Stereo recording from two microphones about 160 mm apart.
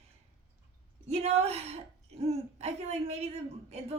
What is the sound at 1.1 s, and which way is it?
Speech, 40° right (ahead or behind).